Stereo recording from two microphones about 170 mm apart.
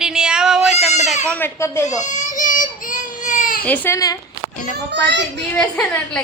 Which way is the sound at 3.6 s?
10° left (ahead or behind).